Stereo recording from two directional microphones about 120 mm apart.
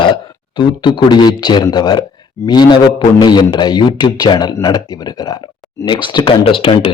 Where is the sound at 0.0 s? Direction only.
40° left (ahead or behind).